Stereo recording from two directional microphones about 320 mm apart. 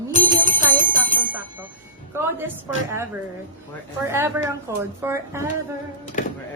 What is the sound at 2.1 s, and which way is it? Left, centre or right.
Speech, centre.